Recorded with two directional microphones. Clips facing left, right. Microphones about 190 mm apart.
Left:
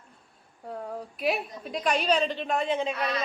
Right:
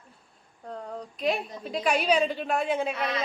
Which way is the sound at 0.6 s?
5° left (ahead or behind).